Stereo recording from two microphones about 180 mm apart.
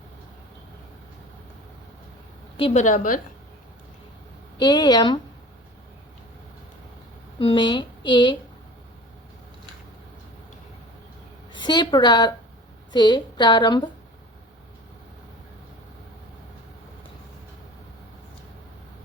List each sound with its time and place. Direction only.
2.6 s a woman's voice: 30° left (ahead or behind)
2.8 s a woman's voice: 45° left (ahead or behind)
4.6 s a woman's voice: 25° left (ahead or behind)
7.3 s a woman's voice: 25° left (ahead or behind)
11.5 s a woman's voice: 25° left (ahead or behind)